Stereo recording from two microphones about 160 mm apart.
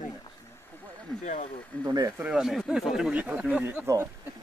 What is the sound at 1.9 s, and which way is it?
Speech, 25° right (ahead or behind).